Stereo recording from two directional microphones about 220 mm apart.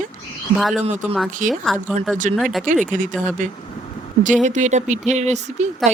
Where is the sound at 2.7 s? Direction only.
35° right (ahead or behind).